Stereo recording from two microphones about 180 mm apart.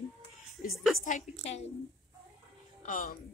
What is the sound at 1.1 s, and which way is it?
Speech, 40° left (ahead or behind).